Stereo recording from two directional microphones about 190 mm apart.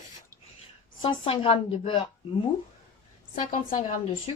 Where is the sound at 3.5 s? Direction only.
40° left (ahead or behind).